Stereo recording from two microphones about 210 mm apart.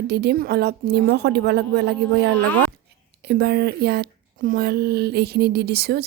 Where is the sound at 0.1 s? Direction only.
50° right (ahead or behind).